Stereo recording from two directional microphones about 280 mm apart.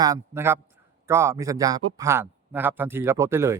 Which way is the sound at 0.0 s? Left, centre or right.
Centre.